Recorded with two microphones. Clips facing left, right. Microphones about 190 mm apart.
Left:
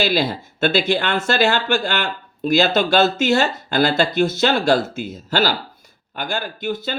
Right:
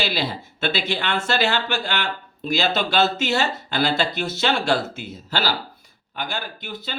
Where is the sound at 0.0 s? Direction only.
45° left (ahead or behind).